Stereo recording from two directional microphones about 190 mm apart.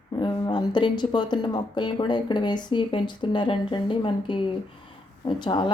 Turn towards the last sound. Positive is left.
turn(degrees=25)  # may be behind; listen again after turning